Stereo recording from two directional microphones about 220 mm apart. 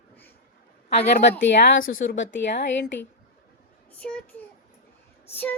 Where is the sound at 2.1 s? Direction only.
55° left (ahead or behind).